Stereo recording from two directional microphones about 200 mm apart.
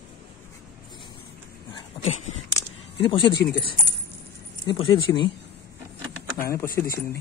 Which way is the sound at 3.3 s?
55° left (ahead or behind).